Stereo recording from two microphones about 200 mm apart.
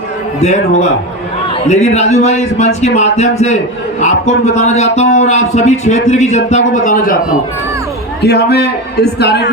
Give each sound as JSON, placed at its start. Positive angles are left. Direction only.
{"t": 0.3, "sound": "speech", "side_deg": 35}
{"t": 8.2, "sound": "a man's voice", "side_deg": 55}